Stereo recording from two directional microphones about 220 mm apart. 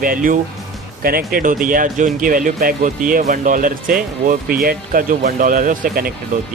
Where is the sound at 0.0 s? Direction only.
40° right (ahead or behind).